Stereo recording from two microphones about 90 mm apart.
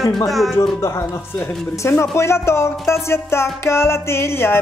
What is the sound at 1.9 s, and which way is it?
Speech, 30° left (ahead or behind).